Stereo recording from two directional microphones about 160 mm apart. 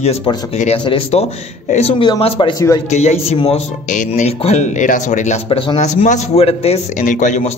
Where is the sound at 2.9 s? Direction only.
45° left (ahead or behind).